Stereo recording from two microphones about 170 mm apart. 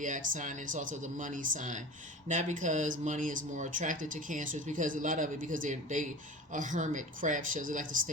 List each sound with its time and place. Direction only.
0.0 s speech: 50° right (ahead or behind)